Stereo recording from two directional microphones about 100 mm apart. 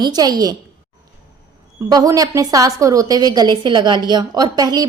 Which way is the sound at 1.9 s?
40° right (ahead or behind).